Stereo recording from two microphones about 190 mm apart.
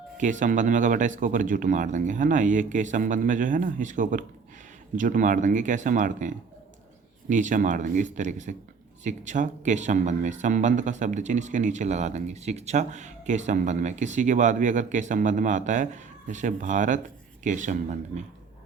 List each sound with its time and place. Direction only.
0.2 s speech: 40° right (ahead or behind)